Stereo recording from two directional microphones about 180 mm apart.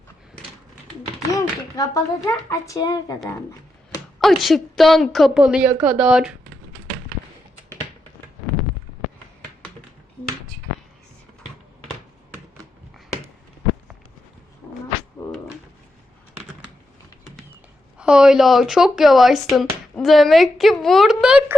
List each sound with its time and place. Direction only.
1.3 s speech: 20° left (ahead or behind)
4.2 s speech: centre (ahead or behind)
17.9 s speech: 5° right (ahead or behind)